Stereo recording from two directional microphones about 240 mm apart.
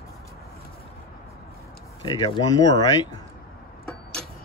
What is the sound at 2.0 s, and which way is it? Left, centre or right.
Speech, centre.